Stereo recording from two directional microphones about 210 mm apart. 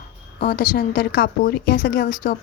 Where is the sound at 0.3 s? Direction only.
45° left (ahead or behind).